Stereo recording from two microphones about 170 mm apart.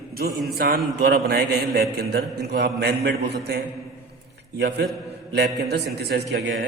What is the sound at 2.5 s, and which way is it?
A man's voice, 75° right (ahead or behind).